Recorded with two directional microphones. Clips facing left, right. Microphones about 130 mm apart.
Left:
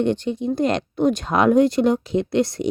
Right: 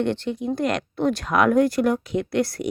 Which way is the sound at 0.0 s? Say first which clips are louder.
Left 3 dB; 20° left (ahead or behind).